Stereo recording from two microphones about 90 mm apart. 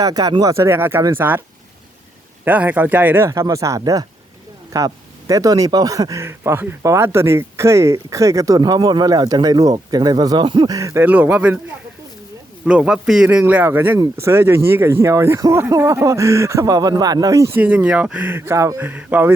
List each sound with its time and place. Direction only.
0.0 s speech: 45° right (ahead or behind)
0.5 s speech: 30° right (ahead or behind)
2.4 s speech: 15° right (ahead or behind)
3.2 s speech: 35° right (ahead or behind)
6.2 s speech: 25° right (ahead or behind); by 10.7 s 60° right (ahead or behind)
10.7 s speech: 40° right (ahead or behind)
11.0 s speech: 20° right (ahead or behind)
12.6 s a man's voice: 10° right (ahead or behind)
13.4 s speech: 25° right (ahead or behind)
17.6 s speech: 20° right (ahead or behind); by 18.8 s 35° right (ahead or behind)
18.8 s speech: 20° right (ahead or behind)